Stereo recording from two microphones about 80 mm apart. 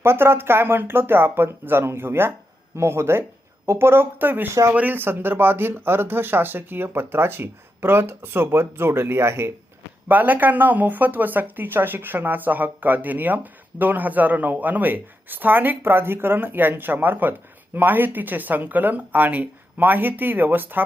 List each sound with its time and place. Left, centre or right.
0.0 s speech: right
10.1 s speech: right